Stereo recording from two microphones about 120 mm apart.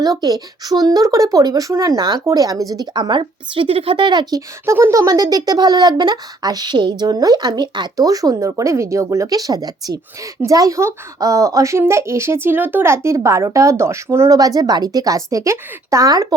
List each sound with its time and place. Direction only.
0.0 s speech: 35° right (ahead or behind)